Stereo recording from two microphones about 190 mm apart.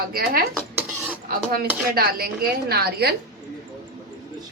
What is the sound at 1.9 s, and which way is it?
A man's voice, 55° right (ahead or behind).